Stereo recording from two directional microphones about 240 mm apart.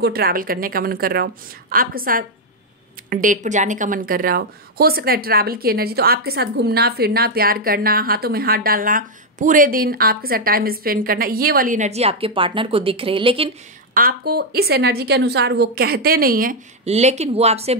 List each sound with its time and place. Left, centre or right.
0.0 s a woman's voice: right
13.9 s a woman's voice: right